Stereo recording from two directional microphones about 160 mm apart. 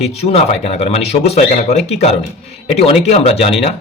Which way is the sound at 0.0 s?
40° left (ahead or behind).